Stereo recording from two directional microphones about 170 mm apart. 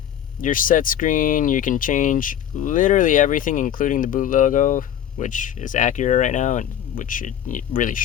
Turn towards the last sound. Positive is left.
turn(degrees=50)  # may be behind; listen again after turning